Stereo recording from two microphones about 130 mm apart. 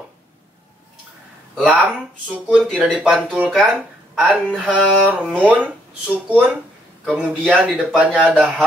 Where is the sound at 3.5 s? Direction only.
Centre (ahead or behind).